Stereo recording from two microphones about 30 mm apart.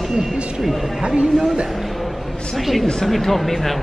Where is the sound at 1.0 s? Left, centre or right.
Right.